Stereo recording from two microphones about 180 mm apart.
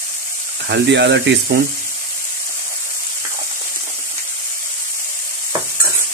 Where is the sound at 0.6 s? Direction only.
80° right.